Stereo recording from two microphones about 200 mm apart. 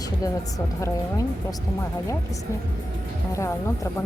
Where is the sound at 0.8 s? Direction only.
15° left (ahead or behind).